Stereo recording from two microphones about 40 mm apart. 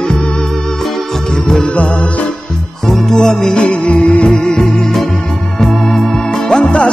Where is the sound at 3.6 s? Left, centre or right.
Left.